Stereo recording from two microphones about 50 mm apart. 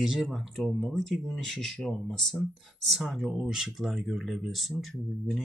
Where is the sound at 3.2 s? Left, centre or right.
Centre.